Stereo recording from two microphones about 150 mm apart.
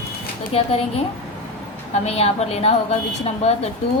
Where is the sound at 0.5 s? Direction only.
40° left (ahead or behind).